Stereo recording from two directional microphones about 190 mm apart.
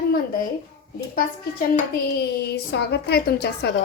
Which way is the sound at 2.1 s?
60° left (ahead or behind).